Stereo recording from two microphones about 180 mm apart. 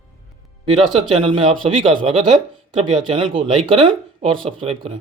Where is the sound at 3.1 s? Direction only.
30° right (ahead or behind).